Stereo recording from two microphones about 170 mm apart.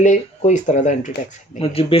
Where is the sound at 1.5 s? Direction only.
35° left (ahead or behind).